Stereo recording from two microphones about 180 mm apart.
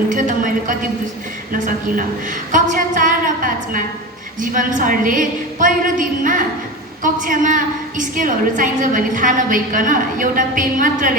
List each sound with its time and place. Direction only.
0.1 s a woman's voice: 45° right (ahead or behind)